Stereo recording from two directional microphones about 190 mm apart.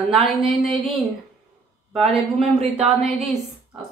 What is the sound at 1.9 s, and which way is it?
Speech, centre (ahead or behind).